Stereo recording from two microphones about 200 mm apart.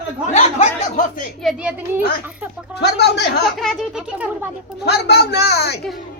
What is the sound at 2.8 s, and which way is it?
Speech, 55° left (ahead or behind).